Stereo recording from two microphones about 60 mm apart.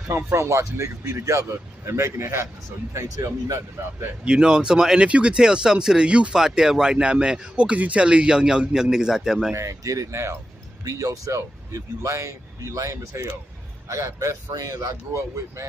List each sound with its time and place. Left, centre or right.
0.1 s a man's voice: right
4.2 s speech: centre
9.5 s a man's voice: right
10.8 s a man's voice: right